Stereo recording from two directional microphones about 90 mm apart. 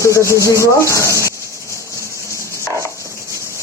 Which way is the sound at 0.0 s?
35° left (ahead or behind).